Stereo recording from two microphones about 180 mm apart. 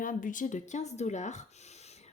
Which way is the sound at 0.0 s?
45° left (ahead or behind).